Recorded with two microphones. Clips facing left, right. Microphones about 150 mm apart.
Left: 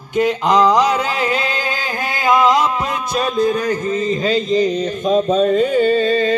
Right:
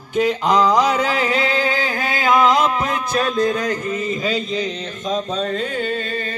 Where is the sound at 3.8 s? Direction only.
30° left (ahead or behind).